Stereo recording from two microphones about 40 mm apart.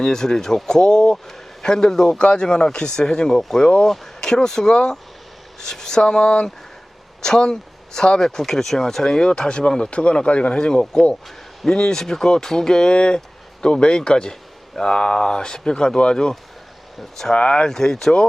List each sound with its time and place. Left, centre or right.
0.0 s speech: centre
4.2 s speech: centre
17.0 s speech: centre
17.3 s speech: left
17.7 s speech: centre